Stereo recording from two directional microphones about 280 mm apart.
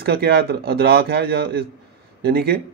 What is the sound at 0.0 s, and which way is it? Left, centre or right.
Speech, right.